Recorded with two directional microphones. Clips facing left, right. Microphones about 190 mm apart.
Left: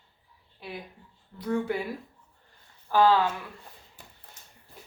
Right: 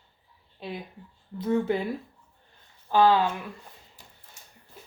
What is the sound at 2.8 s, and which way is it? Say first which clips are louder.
Speech: right 1 dB; 20° right (ahead or behind).